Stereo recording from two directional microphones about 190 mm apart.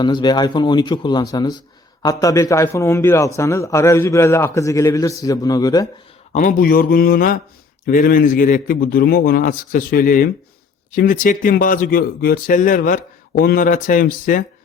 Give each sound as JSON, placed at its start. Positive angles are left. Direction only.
{"t": 0.0, "sound": "a man's voice", "side_deg": 25}
{"t": 6.3, "sound": "speech", "side_deg": 45}